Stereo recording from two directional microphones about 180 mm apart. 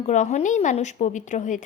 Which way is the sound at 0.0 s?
40° left (ahead or behind).